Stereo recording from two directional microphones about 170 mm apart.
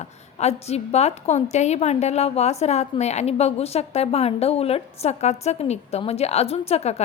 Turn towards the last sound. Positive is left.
turn(degrees=40)  # may be behind; listen again after turning